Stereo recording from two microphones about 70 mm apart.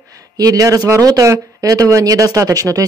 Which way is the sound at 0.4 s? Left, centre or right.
Right.